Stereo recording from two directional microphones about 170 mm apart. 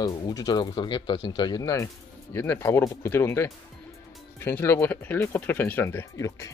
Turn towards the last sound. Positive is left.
turn(degrees=20)  # may be behind; listen again after turning